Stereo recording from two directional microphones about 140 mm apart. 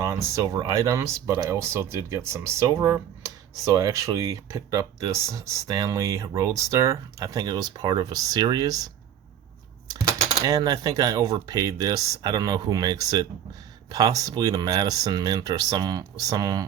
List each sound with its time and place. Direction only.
0.3 s speech: 20° right (ahead or behind)
9.9 s speech: 25° right (ahead or behind)